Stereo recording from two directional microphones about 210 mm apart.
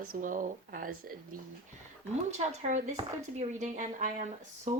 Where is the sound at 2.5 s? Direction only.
35° right (ahead or behind).